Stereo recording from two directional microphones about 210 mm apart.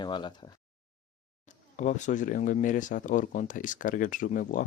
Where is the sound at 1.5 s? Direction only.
35° left (ahead or behind).